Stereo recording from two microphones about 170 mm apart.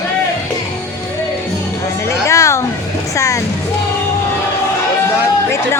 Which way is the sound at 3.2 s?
20° left (ahead or behind).